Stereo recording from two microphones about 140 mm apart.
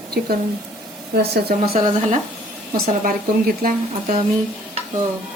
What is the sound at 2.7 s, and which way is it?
Speech, 90° right.